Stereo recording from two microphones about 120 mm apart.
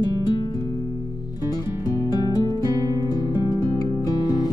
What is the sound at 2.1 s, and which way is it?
Music, 35° left (ahead or behind).